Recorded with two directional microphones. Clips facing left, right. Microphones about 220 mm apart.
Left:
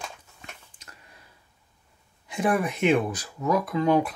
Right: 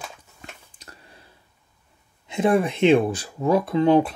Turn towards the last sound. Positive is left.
turn(degrees=-30)  # may be behind; listen again after turning